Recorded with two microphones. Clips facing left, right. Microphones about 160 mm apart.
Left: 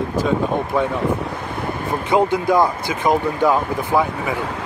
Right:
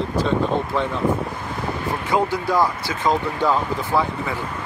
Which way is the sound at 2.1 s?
20° left (ahead or behind).